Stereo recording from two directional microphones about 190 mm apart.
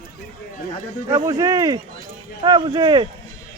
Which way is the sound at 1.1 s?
20° right (ahead or behind).